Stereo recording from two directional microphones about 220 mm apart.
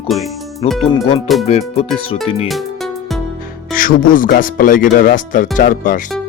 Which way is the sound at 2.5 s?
Centre (ahead or behind).